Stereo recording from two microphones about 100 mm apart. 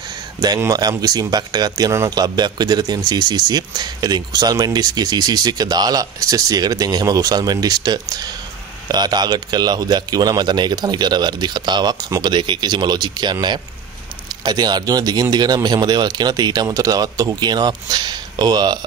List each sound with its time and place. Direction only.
0.6 s speech: 35° right (ahead or behind)